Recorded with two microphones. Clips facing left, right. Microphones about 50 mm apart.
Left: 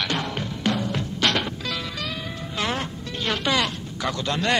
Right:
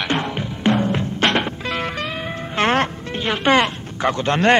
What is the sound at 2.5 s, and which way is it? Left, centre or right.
Music, right.